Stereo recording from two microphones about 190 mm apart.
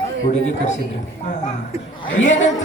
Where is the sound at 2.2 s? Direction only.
40° left (ahead or behind).